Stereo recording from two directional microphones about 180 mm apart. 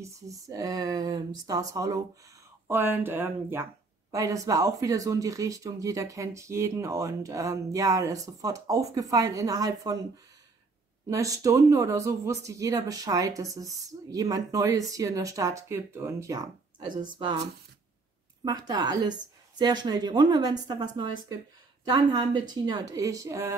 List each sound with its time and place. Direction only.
0.0 s speech: 20° right (ahead or behind)
11.1 s speech: 20° right (ahead or behind)
18.4 s speech: 20° right (ahead or behind)